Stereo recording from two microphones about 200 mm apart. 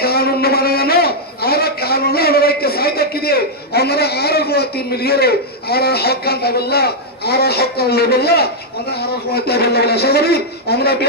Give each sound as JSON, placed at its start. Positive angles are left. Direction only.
{"t": 0.0, "sound": "a man's voice", "side_deg": 50}